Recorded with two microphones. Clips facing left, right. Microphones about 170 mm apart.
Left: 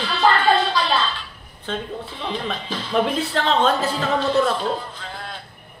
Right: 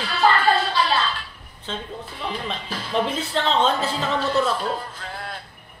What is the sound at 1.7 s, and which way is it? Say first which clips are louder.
Speech: left 4 dB; 55° left (ahead or behind).